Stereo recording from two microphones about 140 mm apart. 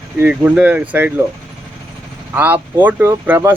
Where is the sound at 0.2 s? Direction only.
10° right (ahead or behind).